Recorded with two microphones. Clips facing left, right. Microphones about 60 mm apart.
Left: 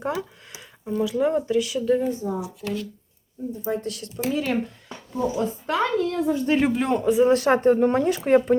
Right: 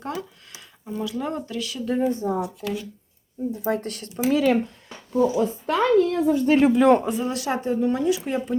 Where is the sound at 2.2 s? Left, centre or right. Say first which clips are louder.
Right 3 dB; right.